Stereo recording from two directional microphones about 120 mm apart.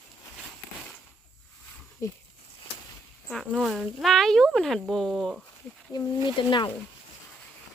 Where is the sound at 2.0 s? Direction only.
25° left (ahead or behind).